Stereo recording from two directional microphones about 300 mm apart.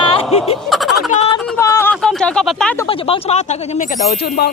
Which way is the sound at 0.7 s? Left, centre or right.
Centre.